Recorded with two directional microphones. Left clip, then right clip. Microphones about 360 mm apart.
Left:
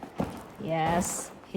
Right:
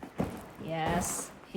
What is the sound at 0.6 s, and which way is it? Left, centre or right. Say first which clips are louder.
Speech: left 5 dB; left.